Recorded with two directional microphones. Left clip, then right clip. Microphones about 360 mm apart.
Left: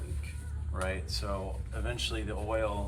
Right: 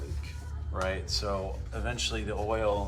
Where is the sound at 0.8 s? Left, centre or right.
Centre.